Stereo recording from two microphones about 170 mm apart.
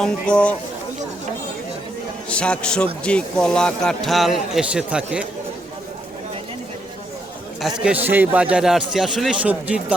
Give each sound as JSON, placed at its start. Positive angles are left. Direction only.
{"t": 0.0, "sound": "speech", "side_deg": 5}
{"t": 2.3, "sound": "speech", "side_deg": 5}
{"t": 7.6, "sound": "speech", "side_deg": 0}